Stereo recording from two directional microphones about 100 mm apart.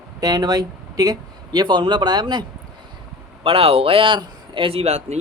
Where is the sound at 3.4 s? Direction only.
70° right (ahead or behind); by 5.1 s 90° right.